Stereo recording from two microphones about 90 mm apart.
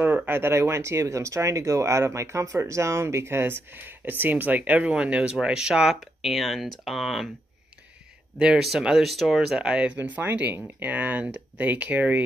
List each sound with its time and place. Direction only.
0.0 s speech: 20° right (ahead or behind); by 7.2 s centre (ahead or behind)
8.4 s speech: 5° right (ahead or behind)